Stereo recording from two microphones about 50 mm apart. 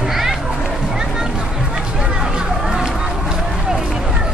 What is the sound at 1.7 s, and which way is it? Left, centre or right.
Run, centre.